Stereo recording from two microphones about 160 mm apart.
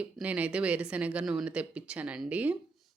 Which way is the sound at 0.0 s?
10° right (ahead or behind).